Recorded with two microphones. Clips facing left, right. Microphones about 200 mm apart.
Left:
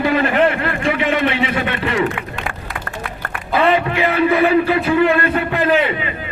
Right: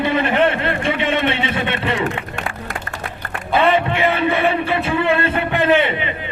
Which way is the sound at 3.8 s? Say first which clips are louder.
Left 2 dB; 25° right (ahead or behind).